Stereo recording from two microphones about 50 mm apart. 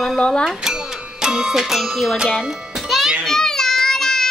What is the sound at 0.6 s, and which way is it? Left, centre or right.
Speech, centre.